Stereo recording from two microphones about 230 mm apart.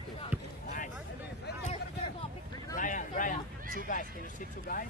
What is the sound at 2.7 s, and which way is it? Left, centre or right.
Speech, left.